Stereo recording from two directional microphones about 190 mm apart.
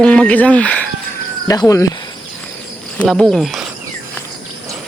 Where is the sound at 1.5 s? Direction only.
15° left (ahead or behind).